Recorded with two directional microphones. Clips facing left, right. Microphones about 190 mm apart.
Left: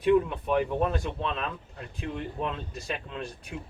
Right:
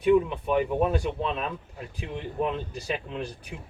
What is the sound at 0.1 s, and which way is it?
Speech, centre (ahead or behind).